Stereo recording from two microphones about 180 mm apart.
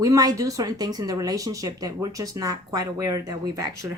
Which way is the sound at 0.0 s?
20° right (ahead or behind).